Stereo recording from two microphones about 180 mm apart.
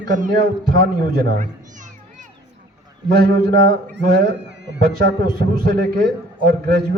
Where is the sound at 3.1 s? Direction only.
60° right (ahead or behind); by 4.7 s 75° right (ahead or behind).